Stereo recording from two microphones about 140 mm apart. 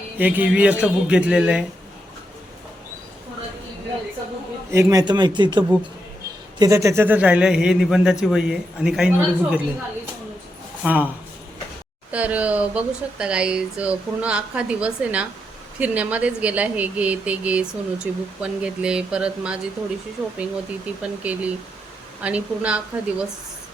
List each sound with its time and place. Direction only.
0.2 s speech: 10° right (ahead or behind)
4.7 s a man's voice: 25° right (ahead or behind)
6.6 s a man's voice: 25° right (ahead or behind); by 9.6 s 5° right (ahead or behind)
10.8 s speech: 10° right (ahead or behind)
12.1 s speech: 10° right (ahead or behind)